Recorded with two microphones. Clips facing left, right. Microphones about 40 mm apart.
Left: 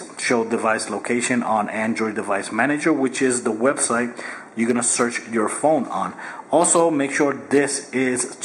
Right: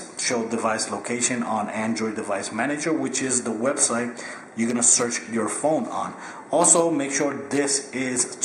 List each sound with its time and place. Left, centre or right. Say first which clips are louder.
0.2 s speech: left 5 dB; centre